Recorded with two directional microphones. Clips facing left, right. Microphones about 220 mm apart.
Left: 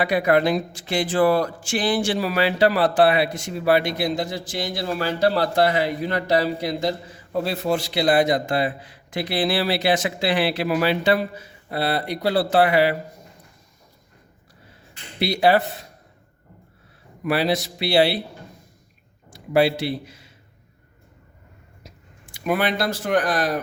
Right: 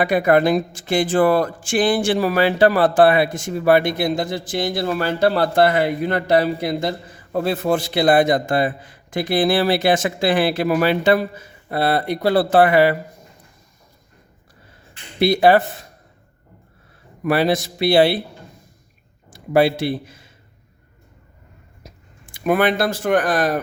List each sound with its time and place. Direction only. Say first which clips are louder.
0.0 s speech: right 3 dB; 50° right (ahead or behind)
15.2 s speech: right 4 dB; 50° right (ahead or behind)
17.2 s speech: right 4 dB; 50° right (ahead or behind)
19.3 s speech: right 3 dB; 50° right (ahead or behind)
22.3 s speech: right 5 dB; 50° right (ahead or behind)